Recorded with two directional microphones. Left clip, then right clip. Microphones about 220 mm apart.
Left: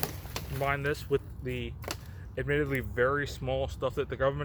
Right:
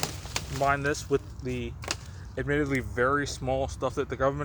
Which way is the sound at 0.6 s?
50° right (ahead or behind).